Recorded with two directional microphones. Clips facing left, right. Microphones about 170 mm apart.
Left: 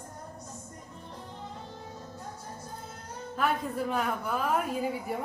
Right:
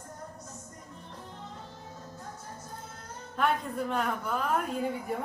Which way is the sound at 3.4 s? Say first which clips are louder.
Even; 5° left (ahead or behind).